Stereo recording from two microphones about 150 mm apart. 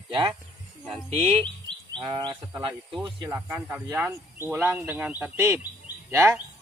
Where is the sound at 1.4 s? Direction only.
30° right (ahead or behind).